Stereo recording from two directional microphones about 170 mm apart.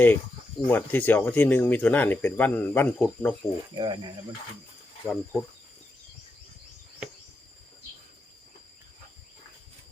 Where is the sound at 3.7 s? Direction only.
25° right (ahead or behind).